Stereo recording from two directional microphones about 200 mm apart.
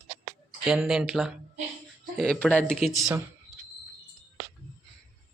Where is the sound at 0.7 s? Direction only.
Centre (ahead or behind).